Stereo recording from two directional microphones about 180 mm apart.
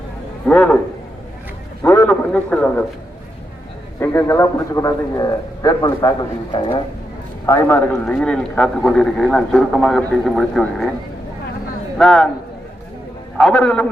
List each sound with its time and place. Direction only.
0.4 s a man's voice: 5° left (ahead or behind)
1.8 s a man's voice: 15° left (ahead or behind)
4.0 s a man's voice: 15° left (ahead or behind)
7.4 s a man's voice: 15° left (ahead or behind)
11.9 s a man's voice: centre (ahead or behind)
13.3 s a man's voice: 5° left (ahead or behind)